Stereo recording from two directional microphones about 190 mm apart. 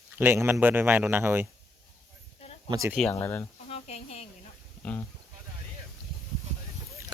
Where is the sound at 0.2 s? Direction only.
10° right (ahead or behind).